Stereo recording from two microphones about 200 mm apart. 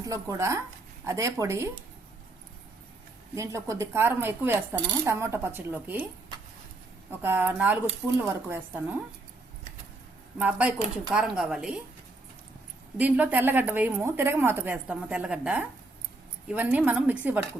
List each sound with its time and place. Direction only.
0.0 s speech: 15° right (ahead or behind)
3.3 s speech: 15° right (ahead or behind)
7.1 s speech: 10° right (ahead or behind)
10.3 s speech: 5° right (ahead or behind)
13.0 s speech: 10° right (ahead or behind)